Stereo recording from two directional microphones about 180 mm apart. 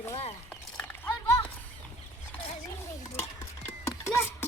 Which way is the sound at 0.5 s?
10° left (ahead or behind).